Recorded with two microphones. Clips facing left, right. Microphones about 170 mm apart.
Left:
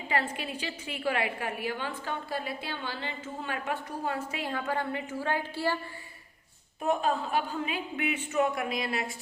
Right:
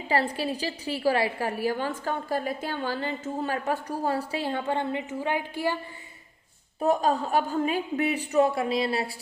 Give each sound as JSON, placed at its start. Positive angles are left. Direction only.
{"t": 0.1, "sound": "a woman's voice", "side_deg": -35}
{"t": 6.7, "sound": "a woman's voice", "side_deg": -35}